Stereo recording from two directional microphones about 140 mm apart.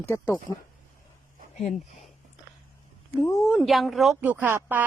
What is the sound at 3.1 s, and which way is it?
Speech, 20° left (ahead or behind).